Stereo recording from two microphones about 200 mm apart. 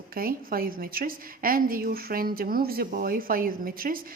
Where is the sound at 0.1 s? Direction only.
45° right (ahead or behind).